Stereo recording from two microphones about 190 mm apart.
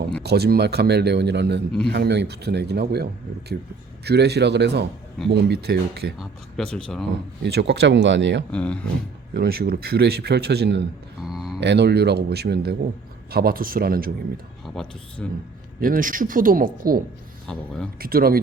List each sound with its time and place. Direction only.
0.2 s a man's voice: 60° right (ahead or behind)
6.1 s speech: 5° left (ahead or behind)
7.4 s speech: 65° right (ahead or behind)
8.5 s speech: 5° left (ahead or behind)
9.3 s a man's voice: 55° right (ahead or behind)
11.2 s a sound: centre (ahead or behind)
11.6 s a man's voice: 65° right (ahead or behind)
14.6 s speech: 5° left (ahead or behind)
15.8 s speech: 45° right (ahead or behind)
17.4 s speech: 5° left (ahead or behind)
18.0 s speech: 50° right (ahead or behind)